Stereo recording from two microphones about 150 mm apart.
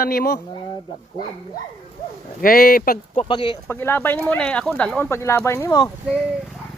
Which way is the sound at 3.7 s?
15° left (ahead or behind).